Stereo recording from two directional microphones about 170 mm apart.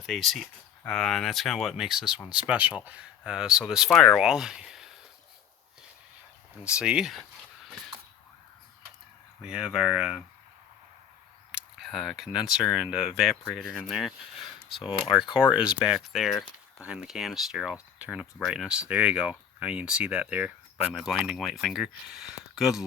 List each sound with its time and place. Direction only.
0.0 s speech: centre (ahead or behind)
6.7 s speech: 5° right (ahead or behind)
9.4 s speech: 5° right (ahead or behind)
11.5 s speech: centre (ahead or behind)
14.8 s speech: 30° left (ahead or behind)
15.2 s speech: 5° right (ahead or behind)